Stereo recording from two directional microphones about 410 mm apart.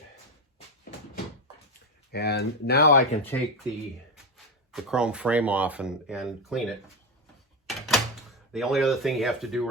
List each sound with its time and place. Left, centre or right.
2.1 s speech: left
3.2 s speech: centre
4.7 s speech: centre
7.7 s a sound: centre